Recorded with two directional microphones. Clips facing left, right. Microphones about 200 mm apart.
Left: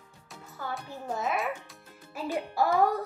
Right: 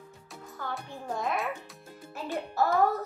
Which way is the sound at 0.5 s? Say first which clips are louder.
Left 1 dB; 5° left (ahead or behind).